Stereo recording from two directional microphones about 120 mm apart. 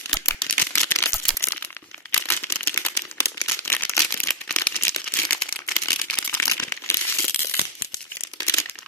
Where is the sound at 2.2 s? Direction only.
15° left (ahead or behind).